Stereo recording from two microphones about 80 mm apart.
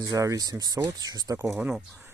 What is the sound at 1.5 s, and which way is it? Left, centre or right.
Speech, centre.